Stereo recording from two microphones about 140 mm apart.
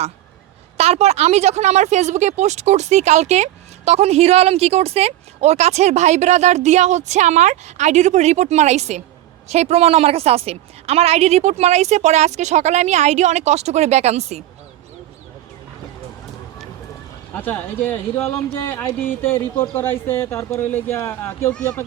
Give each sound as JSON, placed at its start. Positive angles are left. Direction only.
{"t": 0.8, "sound": "a woman's voice", "side_deg": -50}
{"t": 17.3, "sound": "speech", "side_deg": 15}